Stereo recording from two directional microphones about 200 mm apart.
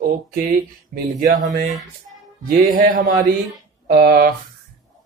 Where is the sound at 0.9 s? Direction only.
45° right (ahead or behind).